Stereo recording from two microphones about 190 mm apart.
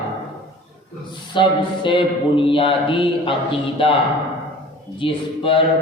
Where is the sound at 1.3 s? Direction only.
25° left (ahead or behind).